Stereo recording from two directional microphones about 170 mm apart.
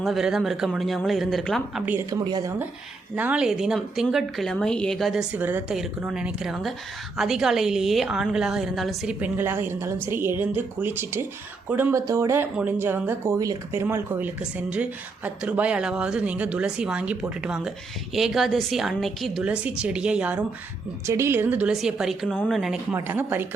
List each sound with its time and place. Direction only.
0.0 s a woman's voice: centre (ahead or behind)
1.8 s speech: 10° right (ahead or behind)
2.0 s speech: 20° right (ahead or behind)
3.2 s a woman's voice: 5° right (ahead or behind)